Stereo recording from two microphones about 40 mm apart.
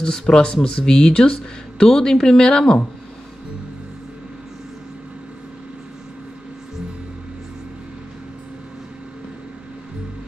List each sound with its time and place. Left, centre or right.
0.0 s speech: centre